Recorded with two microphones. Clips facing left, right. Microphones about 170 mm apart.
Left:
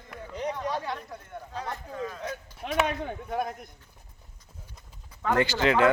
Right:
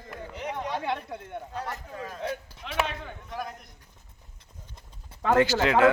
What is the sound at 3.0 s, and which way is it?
Speech, 55° left (ahead or behind).